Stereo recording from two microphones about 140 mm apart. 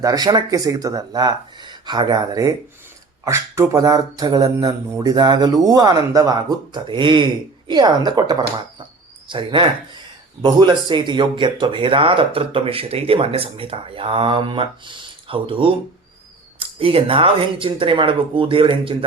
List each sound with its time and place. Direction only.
0.0 s speech: 30° right (ahead or behind)